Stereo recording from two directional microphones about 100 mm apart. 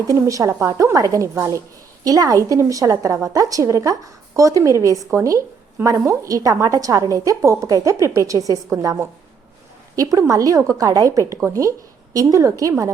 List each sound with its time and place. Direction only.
0.1 s a woman's voice: 35° right (ahead or behind)